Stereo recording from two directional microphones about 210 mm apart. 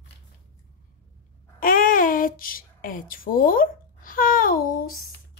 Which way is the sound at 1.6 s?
40° left (ahead or behind).